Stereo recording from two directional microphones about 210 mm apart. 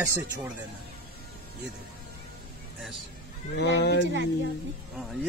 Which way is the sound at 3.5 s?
50° left (ahead or behind).